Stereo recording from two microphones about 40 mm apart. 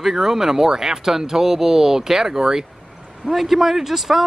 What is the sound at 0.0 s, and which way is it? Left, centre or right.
A man's voice, centre.